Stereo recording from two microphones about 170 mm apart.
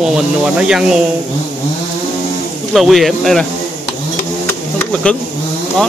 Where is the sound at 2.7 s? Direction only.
Centre (ahead or behind).